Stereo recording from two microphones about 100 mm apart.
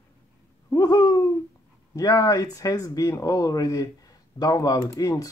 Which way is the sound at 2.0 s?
40° left (ahead or behind).